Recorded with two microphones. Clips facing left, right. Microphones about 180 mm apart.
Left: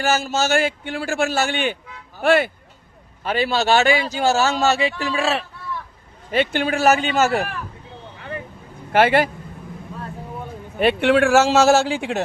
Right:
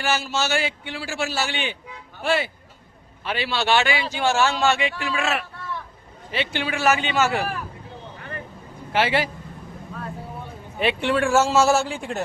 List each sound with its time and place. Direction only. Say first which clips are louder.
0.0 s a man's voice: left 4 dB; 45° left (ahead or behind)
3.2 s speech: left 4 dB; 45° left (ahead or behind)
6.3 s a man's voice: left 6 dB; 50° left (ahead or behind)
8.9 s a man's voice: left 6 dB; 50° left (ahead or behind)
10.8 s a man's voice: left 5 dB; 50° left (ahead or behind)
11.1 s a man's voice: left 4 dB; 75° left (ahead or behind)